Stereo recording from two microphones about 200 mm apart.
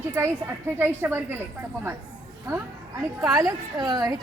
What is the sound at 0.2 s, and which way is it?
Speech, 15° right (ahead or behind).